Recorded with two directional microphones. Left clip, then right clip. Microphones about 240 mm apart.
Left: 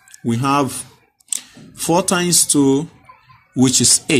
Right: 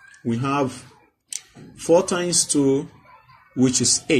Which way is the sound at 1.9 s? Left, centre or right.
Left.